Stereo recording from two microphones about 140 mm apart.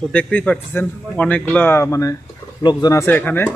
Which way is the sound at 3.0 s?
15° left (ahead or behind).